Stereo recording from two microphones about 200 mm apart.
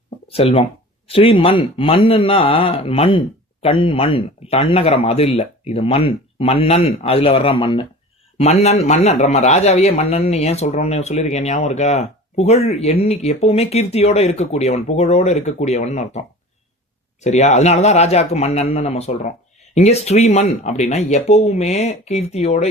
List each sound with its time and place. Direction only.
0.3 s speech: 30° left (ahead or behind)